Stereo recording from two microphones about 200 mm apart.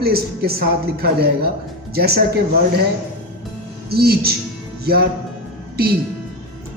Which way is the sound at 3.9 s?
50° right (ahead or behind).